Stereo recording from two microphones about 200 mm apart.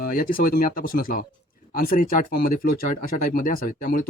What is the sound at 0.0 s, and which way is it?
Speech, 45° left (ahead or behind).